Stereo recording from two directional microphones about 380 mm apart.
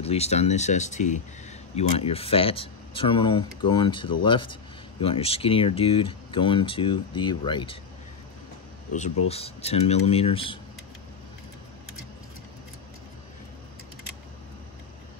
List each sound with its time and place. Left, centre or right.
0.0 s speech: centre
9.3 s speech: centre